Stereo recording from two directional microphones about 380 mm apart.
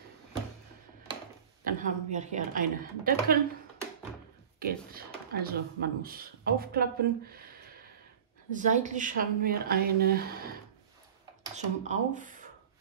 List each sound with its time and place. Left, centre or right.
1.6 s speech: right
4.6 s speech: right
8.5 s speech: centre